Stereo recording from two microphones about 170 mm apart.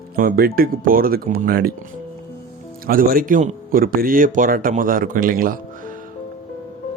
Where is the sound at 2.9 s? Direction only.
55° right (ahead or behind).